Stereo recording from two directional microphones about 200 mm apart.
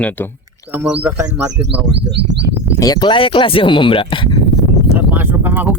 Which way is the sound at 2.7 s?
20° left (ahead or behind).